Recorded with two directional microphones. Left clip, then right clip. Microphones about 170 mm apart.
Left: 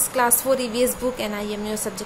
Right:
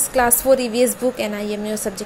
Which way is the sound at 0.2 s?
20° right (ahead or behind).